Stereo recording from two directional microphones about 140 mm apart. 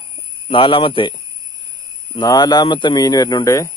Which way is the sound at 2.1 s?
30° left (ahead or behind).